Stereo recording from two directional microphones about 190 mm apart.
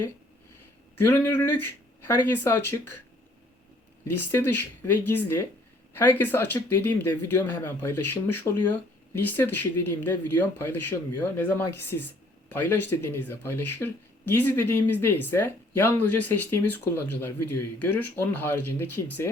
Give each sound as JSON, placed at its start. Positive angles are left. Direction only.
{"t": 1.0, "sound": "speech", "side_deg": 10}
{"t": 4.0, "sound": "speech", "side_deg": 10}